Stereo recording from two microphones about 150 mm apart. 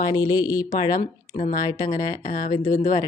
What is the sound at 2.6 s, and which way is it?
Speech, 60° left (ahead or behind).